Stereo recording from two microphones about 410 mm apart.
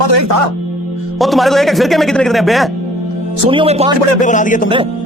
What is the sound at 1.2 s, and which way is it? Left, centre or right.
Speech, centre.